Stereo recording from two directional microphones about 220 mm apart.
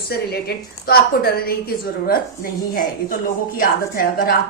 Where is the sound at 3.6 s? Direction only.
40° left (ahead or behind).